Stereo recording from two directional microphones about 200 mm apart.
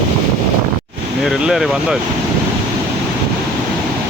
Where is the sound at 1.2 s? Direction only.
Centre (ahead or behind).